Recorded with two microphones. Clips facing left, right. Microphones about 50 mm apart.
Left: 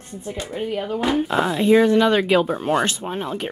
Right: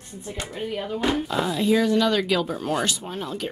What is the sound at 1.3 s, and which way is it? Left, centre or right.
Speech, left.